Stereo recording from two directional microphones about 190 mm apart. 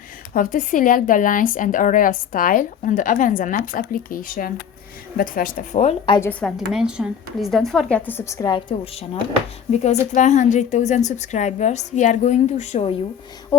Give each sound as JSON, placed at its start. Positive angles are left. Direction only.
{"t": 0.3, "sound": "speech", "side_deg": 45}
{"t": 6.4, "sound": "a woman's voice", "side_deg": -5}